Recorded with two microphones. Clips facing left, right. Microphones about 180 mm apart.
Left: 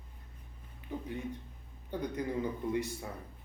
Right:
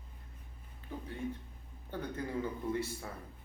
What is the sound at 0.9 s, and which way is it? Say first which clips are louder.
A man's voice: left 1 dB; 15° left (ahead or behind).